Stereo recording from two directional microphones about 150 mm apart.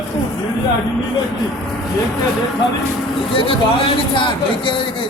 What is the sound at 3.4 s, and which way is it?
Speech, 35° left (ahead or behind).